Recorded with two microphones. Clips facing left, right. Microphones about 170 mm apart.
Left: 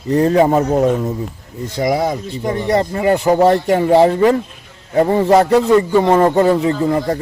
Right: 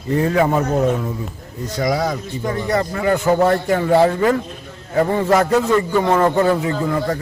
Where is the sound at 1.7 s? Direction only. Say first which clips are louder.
Left 3 dB; 25° left (ahead or behind).